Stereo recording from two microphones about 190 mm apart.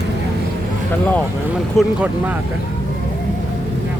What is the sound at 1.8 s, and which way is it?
Speech, centre (ahead or behind).